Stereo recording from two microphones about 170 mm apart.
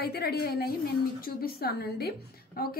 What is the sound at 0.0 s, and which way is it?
A woman's voice, 65° left (ahead or behind).